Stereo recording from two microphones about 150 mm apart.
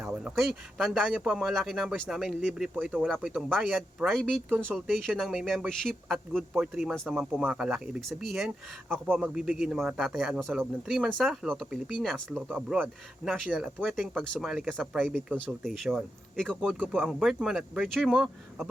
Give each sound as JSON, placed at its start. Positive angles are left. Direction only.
{"t": 0.0, "sound": "speech", "side_deg": -5}